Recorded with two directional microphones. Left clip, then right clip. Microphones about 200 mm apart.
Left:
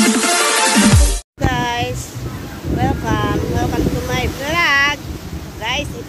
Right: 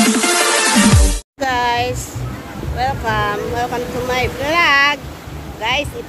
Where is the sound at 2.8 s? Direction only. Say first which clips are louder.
Right 2 dB; centre (ahead or behind).